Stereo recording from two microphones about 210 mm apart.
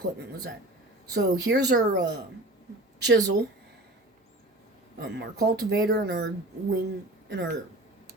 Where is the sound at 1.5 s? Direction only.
50° right (ahead or behind).